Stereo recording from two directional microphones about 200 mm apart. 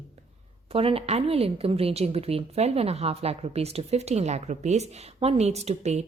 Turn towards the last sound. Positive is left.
turn(degrees=-35)  # may be behind; listen again after turning